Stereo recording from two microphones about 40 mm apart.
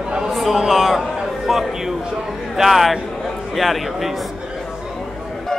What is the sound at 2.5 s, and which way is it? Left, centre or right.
Speech, centre.